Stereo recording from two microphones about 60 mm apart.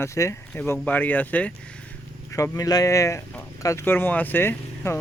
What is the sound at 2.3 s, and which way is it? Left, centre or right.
Speech, left.